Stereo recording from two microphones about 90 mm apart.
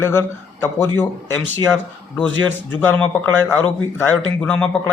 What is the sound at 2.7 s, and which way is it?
Speech, 20° left (ahead or behind).